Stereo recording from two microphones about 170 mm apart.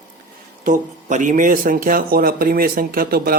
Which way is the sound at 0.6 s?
50° right (ahead or behind).